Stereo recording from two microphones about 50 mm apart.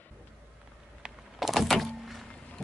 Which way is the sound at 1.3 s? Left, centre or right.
Centre.